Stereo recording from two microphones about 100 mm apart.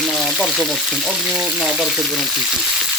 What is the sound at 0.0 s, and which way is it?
Speech, 5° left (ahead or behind).